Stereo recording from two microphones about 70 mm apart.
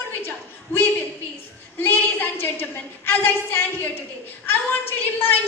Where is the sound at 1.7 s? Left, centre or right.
Left.